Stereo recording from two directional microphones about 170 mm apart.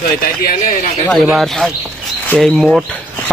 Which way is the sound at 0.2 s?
60° left (ahead or behind).